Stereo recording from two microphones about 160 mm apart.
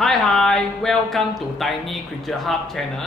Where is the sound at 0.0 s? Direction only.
5° left (ahead or behind).